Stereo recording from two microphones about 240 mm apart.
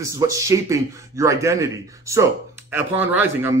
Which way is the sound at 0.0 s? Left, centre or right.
Centre.